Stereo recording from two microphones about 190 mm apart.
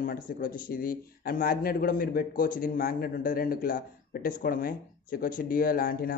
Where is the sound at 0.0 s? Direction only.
50° left (ahead or behind).